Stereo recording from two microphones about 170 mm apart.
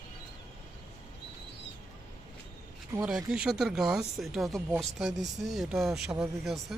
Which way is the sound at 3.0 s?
5° right (ahead or behind).